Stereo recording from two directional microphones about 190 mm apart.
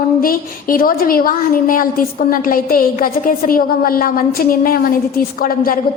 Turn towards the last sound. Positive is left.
turn(degrees=50)  # may be behind; listen again after turning